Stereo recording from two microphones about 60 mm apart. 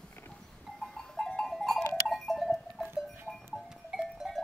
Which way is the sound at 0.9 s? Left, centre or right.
Centre.